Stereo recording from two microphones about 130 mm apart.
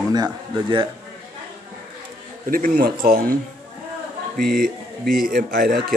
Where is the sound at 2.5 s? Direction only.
90° right.